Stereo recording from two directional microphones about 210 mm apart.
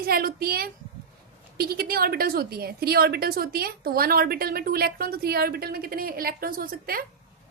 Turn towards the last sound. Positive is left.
turn(degrees=-45)  # may be behind; listen again after turning